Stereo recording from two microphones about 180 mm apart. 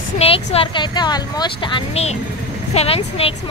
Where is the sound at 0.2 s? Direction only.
35° left (ahead or behind).